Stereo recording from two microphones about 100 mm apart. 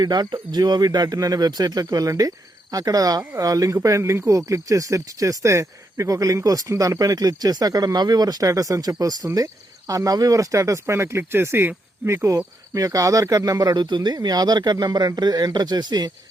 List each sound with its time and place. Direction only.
0.0 s speech: 45° right (ahead or behind)